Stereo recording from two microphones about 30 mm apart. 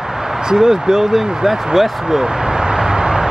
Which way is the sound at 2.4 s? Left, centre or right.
Right.